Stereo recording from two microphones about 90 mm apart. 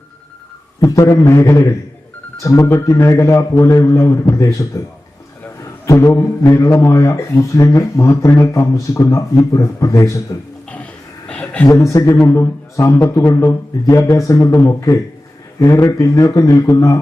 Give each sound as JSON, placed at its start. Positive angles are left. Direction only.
{"t": 0.8, "sound": "a man's voice", "side_deg": 35}
{"t": 11.3, "sound": "a sound", "side_deg": 15}
{"t": 11.7, "sound": "speech", "side_deg": 35}